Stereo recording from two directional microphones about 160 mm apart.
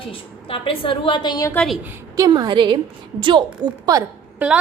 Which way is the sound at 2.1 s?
25° right (ahead or behind).